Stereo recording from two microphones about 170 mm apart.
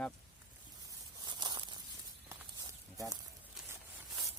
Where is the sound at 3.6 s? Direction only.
5° right (ahead or behind).